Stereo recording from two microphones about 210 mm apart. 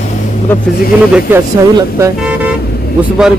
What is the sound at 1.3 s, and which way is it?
Speech, 10° right (ahead or behind).